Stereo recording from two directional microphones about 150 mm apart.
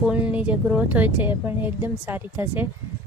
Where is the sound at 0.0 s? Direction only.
10° right (ahead or behind).